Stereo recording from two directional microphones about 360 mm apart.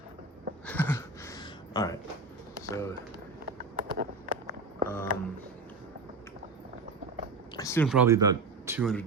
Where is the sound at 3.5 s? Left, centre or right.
Right.